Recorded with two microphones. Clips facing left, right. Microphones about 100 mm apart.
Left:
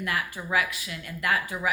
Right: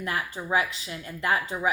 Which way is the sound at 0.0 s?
30° right (ahead or behind).